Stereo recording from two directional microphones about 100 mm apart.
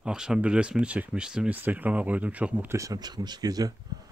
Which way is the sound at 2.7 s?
35° right (ahead or behind).